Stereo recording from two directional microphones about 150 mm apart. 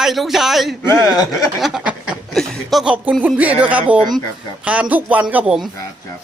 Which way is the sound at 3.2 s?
10° right (ahead or behind).